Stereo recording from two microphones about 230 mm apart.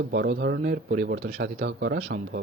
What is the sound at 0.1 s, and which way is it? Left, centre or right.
Speech, right.